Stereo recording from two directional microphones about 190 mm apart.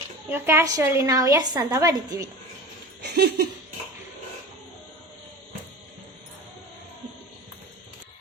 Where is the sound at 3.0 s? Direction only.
60° right (ahead or behind).